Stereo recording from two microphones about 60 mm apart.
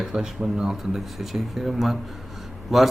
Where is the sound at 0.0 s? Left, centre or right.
Centre.